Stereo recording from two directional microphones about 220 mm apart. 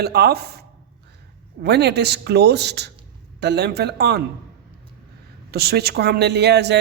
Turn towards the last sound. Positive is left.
turn(degrees=-50)  # may be behind; listen again after turning